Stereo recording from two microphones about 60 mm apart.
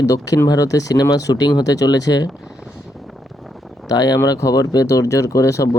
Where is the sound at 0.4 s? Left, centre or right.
Left.